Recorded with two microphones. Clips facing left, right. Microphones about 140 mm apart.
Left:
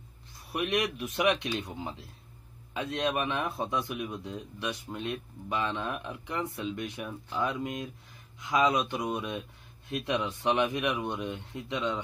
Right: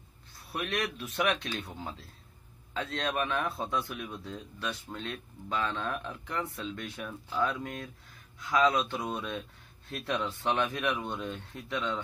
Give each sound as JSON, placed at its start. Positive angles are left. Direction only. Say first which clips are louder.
{"t": 0.5, "sound": "a man's voice", "louder": "left 4 dB", "side_deg": 15}